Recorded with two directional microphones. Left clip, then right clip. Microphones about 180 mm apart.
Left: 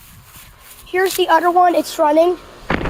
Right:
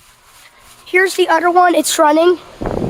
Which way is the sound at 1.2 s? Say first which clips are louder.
Even; 25° right (ahead or behind).